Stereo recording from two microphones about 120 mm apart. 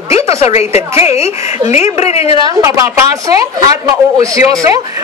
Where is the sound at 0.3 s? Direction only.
60° left (ahead or behind).